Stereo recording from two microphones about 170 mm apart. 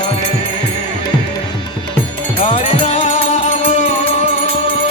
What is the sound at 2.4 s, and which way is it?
Music, 45° left (ahead or behind).